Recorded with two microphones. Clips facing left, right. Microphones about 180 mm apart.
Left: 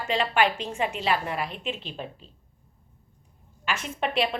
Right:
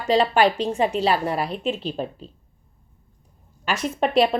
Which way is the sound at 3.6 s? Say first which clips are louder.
Right 6 dB; 40° right (ahead or behind).